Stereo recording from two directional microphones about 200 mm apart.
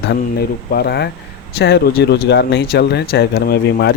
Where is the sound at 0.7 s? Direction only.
50° left (ahead or behind).